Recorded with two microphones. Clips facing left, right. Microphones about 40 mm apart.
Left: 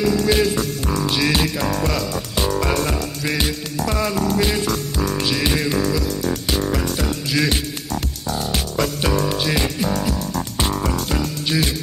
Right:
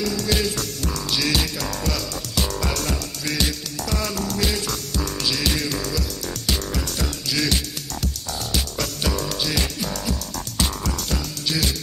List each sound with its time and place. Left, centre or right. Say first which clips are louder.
0.0 s music: left 6 dB; left